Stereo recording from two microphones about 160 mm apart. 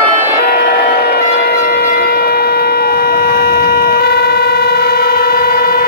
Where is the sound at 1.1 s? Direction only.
80° left.